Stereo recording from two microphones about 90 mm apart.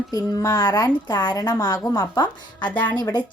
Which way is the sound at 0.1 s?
40° left (ahead or behind).